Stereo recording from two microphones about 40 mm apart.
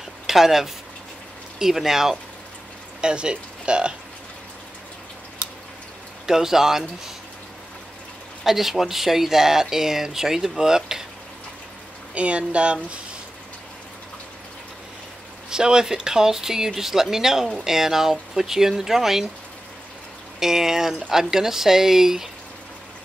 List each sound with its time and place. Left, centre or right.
0.3 s speech: centre
3.0 s speech: right
6.2 s speech: centre
8.5 s speech: centre
12.1 s speech: right
15.5 s speech: centre
20.3 s speech: centre